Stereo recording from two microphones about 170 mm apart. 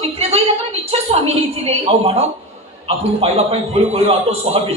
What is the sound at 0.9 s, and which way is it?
Speech, 40° right (ahead or behind).